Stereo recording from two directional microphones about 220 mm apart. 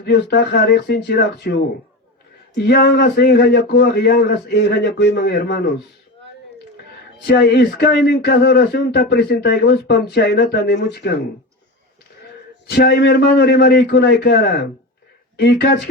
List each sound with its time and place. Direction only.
0.0 s speech: 50° left (ahead or behind)
2.6 s speech: 50° left (ahead or behind)
7.3 s speech: 45° left (ahead or behind)
12.6 s speech: 45° left (ahead or behind)